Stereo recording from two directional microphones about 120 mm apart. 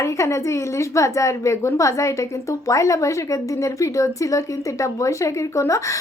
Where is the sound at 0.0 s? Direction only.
25° left (ahead or behind).